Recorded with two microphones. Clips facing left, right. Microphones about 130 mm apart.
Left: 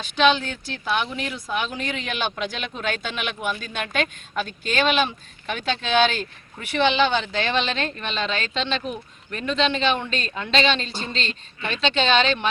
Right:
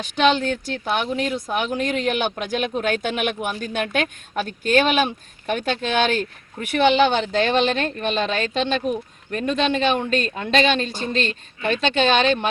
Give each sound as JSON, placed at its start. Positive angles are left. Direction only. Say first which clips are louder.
{"t": 0.2, "sound": "a woman's voice", "louder": "right 1 dB", "side_deg": -45}